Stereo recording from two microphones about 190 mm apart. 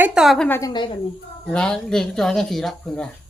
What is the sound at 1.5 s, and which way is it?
Speech, 5° left (ahead or behind).